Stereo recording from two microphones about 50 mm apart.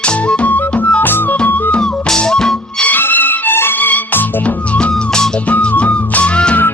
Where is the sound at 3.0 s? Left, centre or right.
Left.